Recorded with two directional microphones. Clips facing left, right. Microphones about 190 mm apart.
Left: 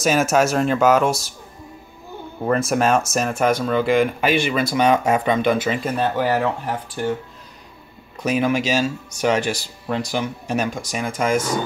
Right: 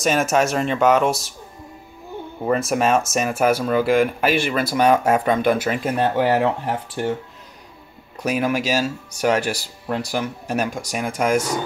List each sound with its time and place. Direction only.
0.0 s speech: centre (ahead or behind)
2.4 s speech: centre (ahead or behind)
6.1 s speech: 25° right (ahead or behind)
8.2 s speech: 10° right (ahead or behind)